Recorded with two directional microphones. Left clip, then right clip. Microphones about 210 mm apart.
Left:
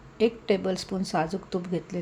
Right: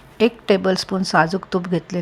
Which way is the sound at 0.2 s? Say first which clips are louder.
Right 7 dB; 15° right (ahead or behind).